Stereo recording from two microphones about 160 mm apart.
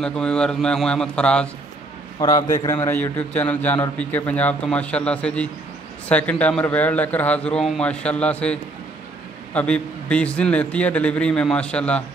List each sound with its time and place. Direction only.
0.0 s speech: 5° left (ahead or behind)
2.1 s a man's voice: 20° left (ahead or behind); by 12.0 s 5° left (ahead or behind)